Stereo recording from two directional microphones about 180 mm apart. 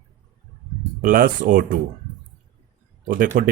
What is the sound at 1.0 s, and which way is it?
Speech, 50° right (ahead or behind).